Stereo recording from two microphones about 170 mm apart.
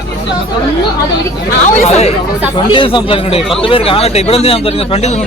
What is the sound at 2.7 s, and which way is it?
Speech, 30° left (ahead or behind).